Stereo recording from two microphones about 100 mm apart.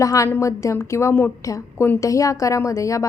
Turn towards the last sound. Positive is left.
turn(degrees=30)  # may be behind; listen again after turning